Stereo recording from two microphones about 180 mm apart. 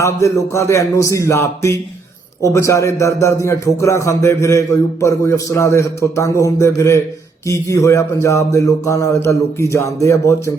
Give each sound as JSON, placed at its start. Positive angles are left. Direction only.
{"t": 0.0, "sound": "a man's voice", "side_deg": 15}